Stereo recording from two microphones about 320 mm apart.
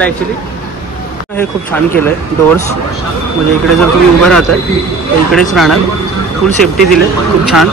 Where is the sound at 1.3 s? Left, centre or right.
Centre.